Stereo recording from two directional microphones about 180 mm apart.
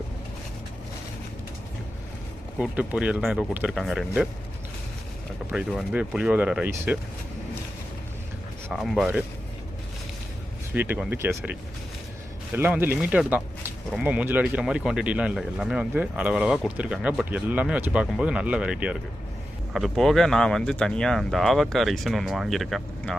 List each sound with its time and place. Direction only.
2.6 s speech: 5° right (ahead or behind)
5.5 s speech: 5° right (ahead or behind)
8.7 s speech: centre (ahead or behind)
10.8 s speech: 10° right (ahead or behind)
12.5 s speech: 10° right (ahead or behind)